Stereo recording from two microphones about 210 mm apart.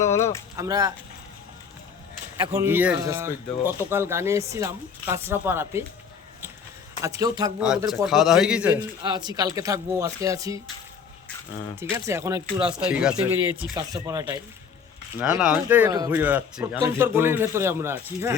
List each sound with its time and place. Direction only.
0.0 s speech: 15° left (ahead or behind)
0.5 s speech: 15° right (ahead or behind)
2.5 s speech: 10° right (ahead or behind)
7.2 s speech: 15° right (ahead or behind)
8.0 s speech: centre (ahead or behind)
8.7 s speech: 20° right (ahead or behind)
11.8 s speech: 15° right (ahead or behind)
13.7 s speech: 15° right (ahead or behind)
15.2 s speech: 5° right (ahead or behind)
15.9 s speech: 20° right (ahead or behind)